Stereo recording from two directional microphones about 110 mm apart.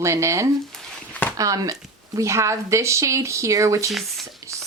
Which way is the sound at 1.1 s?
15° left (ahead or behind).